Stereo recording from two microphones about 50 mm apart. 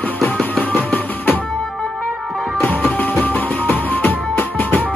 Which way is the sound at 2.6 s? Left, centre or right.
Left.